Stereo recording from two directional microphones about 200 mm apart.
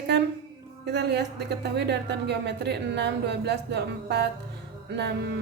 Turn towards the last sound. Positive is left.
turn(degrees=-60)  # may be behind; listen again after turning